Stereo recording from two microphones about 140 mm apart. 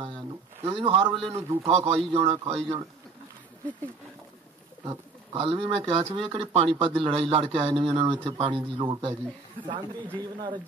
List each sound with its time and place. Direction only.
0.0 s a sound: 40° right (ahead or behind)
1.3 s a man's voice: 45° right (ahead or behind)
5.3 s a man's voice: 45° right (ahead or behind)
10.1 s speech: 35° right (ahead or behind)